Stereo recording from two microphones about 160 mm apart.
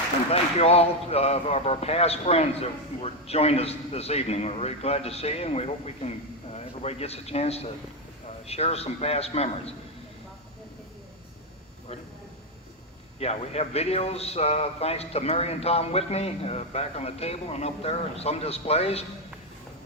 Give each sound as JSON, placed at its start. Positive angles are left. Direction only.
{"t": 0.3, "sound": "speech", "side_deg": 40}
{"t": 13.1, "sound": "speech", "side_deg": 40}